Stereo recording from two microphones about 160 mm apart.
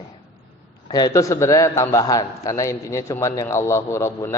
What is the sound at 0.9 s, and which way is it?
A man's voice, 25° left (ahead or behind).